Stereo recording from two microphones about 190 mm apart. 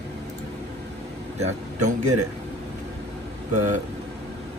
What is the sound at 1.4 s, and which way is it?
Speech, 40° right (ahead or behind).